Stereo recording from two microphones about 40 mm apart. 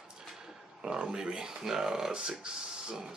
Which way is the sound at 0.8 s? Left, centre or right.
Right.